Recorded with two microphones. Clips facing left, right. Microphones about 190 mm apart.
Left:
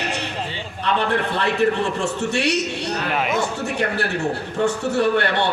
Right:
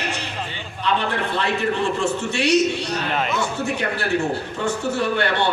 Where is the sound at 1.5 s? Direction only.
70° left (ahead or behind).